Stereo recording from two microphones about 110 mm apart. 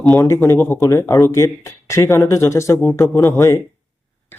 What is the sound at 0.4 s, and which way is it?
Speech, 20° left (ahead or behind).